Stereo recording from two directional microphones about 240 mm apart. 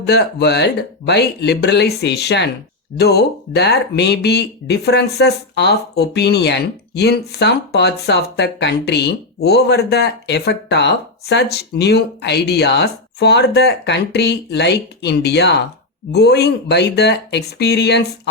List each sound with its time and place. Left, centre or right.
0.0 s speech: left